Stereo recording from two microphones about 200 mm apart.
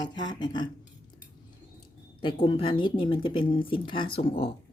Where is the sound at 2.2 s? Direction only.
25° left (ahead or behind).